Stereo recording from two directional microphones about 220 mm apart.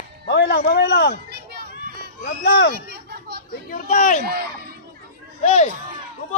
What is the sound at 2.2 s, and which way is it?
Speech, 50° left (ahead or behind).